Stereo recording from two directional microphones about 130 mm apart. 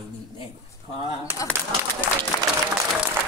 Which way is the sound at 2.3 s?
30° left (ahead or behind).